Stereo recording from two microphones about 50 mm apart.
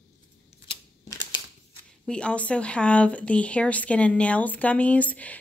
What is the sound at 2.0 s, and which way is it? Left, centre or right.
Speech, left.